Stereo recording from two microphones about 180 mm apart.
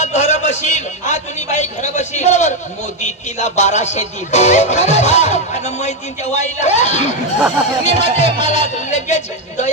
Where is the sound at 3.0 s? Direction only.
40° left (ahead or behind).